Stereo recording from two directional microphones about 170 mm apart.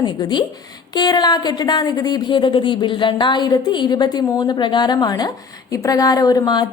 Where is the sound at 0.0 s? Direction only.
25° left (ahead or behind).